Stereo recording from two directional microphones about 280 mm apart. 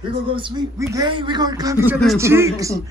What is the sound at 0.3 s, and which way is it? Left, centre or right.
A man's voice, centre.